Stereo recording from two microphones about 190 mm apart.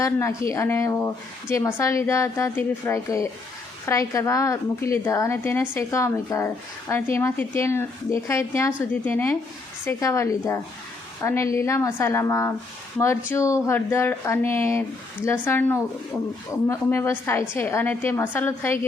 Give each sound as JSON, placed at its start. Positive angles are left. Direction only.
{"t": 0.0, "sound": "a woman's voice", "side_deg": 15}